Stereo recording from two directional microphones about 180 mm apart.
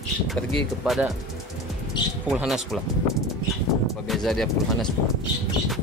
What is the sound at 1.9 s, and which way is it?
Speech, 25° left (ahead or behind).